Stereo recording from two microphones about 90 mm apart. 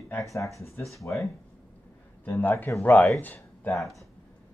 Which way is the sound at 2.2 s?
20° left (ahead or behind).